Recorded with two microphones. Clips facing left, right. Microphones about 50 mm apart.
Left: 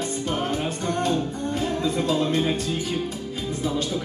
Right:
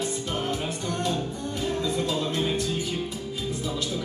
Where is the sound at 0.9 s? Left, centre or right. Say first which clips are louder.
Left 5 dB; left.